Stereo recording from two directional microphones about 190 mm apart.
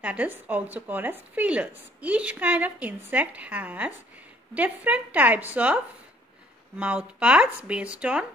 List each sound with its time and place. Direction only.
0.0 s speech: 5° right (ahead or behind)
6.8 s speech: 5° right (ahead or behind)